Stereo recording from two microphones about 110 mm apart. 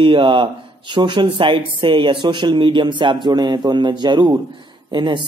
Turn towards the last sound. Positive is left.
turn(degrees=-45)  # may be behind; listen again after turning